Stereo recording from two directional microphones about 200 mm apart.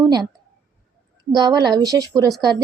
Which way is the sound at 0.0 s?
20° right (ahead or behind).